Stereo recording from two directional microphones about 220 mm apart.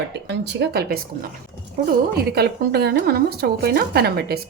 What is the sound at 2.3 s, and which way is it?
Speech, 45° right (ahead or behind).